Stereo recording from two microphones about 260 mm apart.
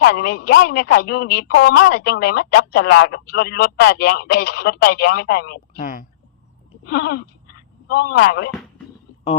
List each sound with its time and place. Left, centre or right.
0.0 s speech: left